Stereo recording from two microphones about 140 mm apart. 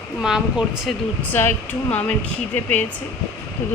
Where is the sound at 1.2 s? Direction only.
15° left (ahead or behind).